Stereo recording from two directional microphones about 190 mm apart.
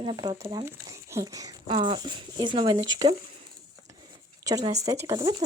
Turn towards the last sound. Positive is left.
turn(degrees=-20)  # may be behind; listen again after turning